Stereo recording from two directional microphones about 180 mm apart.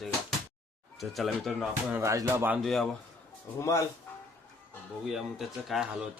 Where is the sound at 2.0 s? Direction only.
15° right (ahead or behind).